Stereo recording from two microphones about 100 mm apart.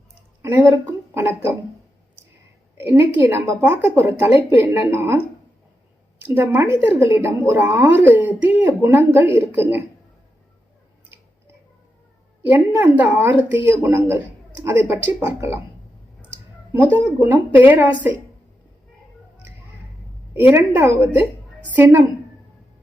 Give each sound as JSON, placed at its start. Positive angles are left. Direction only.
{"t": 0.4, "sound": "speech", "side_deg": -20}
{"t": 2.7, "sound": "speech", "side_deg": -20}
{"t": 6.2, "sound": "speech", "side_deg": -20}
{"t": 12.5, "sound": "speech", "side_deg": -20}
{"t": 16.7, "sound": "speech", "side_deg": -20}
{"t": 20.7, "sound": "speech", "side_deg": -25}